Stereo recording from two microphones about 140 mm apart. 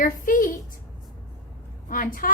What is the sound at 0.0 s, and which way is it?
Speech, 80° left.